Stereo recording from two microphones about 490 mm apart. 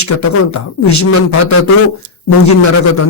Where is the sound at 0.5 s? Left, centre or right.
Left.